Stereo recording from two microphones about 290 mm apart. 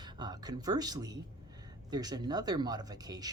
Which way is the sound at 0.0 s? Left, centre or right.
Centre.